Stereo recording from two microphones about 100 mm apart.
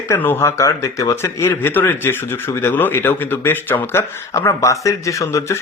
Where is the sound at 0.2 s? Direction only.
20° left (ahead or behind).